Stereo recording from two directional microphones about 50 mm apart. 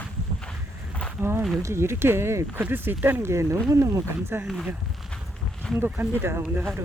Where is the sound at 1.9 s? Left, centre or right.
Right.